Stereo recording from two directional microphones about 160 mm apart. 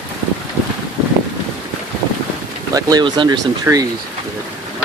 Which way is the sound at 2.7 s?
25° right (ahead or behind).